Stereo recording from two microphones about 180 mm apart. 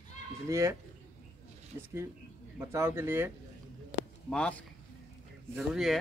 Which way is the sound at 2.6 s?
15° right (ahead or behind).